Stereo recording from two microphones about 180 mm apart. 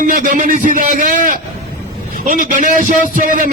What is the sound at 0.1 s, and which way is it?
A man's voice, 45° right (ahead or behind).